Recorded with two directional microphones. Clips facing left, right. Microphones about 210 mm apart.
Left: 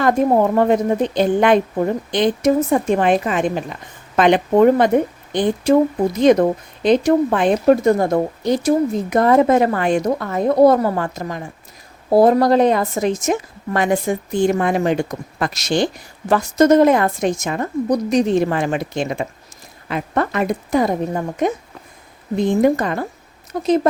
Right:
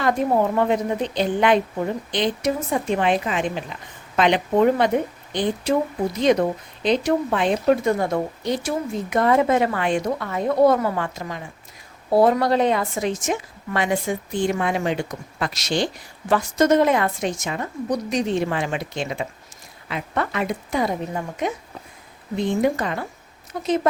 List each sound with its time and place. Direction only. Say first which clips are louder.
0.0 s speech: left 5 dB; 50° left (ahead or behind)